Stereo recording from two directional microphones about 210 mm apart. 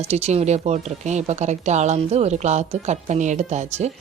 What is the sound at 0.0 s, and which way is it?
A woman's voice, 30° right (ahead or behind).